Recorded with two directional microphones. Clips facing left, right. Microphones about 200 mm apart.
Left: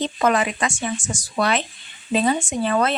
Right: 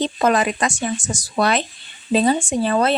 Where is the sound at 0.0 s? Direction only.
35° right (ahead or behind).